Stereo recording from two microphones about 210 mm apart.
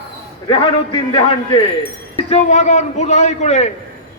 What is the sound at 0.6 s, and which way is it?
A man's voice, 25° left (ahead or behind).